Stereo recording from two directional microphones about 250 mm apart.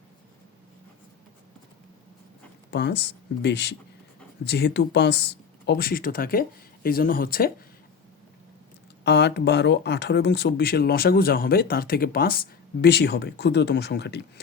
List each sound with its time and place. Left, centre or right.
2.6 s speech: left
9.0 s speech: left